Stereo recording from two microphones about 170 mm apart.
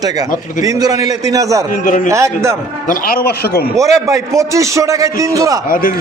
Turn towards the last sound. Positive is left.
turn(degrees=55)  # may be behind; listen again after turning